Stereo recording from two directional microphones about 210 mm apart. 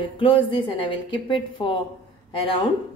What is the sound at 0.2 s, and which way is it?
A woman's voice, 25° left (ahead or behind).